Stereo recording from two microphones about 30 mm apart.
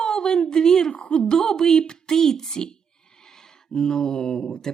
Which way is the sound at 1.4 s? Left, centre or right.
Centre.